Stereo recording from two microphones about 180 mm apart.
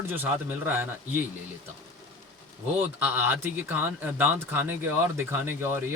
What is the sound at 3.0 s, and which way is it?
Speech, 10° right (ahead or behind).